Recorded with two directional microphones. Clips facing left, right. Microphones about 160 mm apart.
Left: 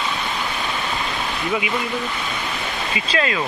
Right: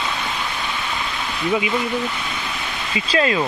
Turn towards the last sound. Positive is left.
turn(degrees=-35)  # may be behind; listen again after turning